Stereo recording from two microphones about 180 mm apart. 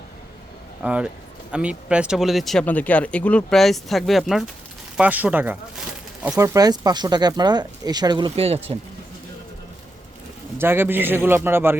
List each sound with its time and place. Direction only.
0.8 s speech: 5° right (ahead or behind); by 8.8 s 35° right (ahead or behind)
10.6 s a man's voice: 10° right (ahead or behind)